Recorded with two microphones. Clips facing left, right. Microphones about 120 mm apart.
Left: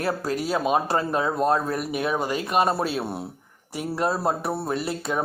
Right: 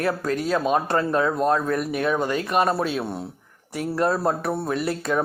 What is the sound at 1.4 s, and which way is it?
Speech, 30° left (ahead or behind).